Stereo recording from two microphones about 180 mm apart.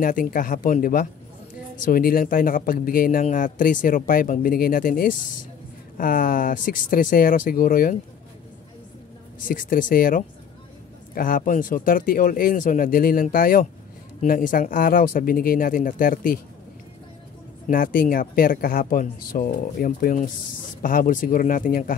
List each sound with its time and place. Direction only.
0.0 s speech: 50° left (ahead or behind)
9.4 s speech: 50° left (ahead or behind)
17.6 s speech: 50° left (ahead or behind)